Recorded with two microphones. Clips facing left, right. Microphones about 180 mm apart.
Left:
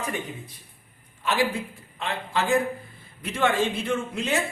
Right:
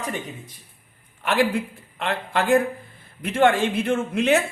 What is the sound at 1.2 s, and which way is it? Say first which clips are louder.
A man's voice: right 4 dB; 55° right (ahead or behind).